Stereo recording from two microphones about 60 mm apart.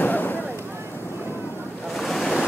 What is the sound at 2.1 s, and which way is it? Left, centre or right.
Waves, centre.